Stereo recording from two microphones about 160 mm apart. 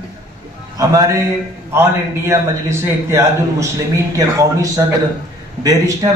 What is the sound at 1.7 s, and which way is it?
A man's voice, 15° right (ahead or behind).